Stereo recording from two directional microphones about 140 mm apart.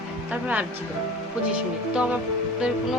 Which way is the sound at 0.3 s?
10° right (ahead or behind).